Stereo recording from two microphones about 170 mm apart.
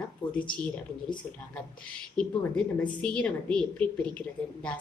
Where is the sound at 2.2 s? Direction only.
5° left (ahead or behind).